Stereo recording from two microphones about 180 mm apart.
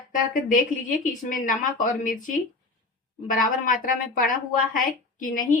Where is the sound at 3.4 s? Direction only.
50° left (ahead or behind).